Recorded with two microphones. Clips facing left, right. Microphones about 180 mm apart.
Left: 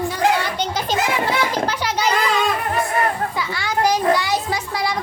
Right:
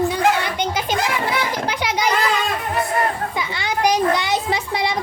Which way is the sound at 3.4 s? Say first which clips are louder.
Right 1 dB; 20° right (ahead or behind).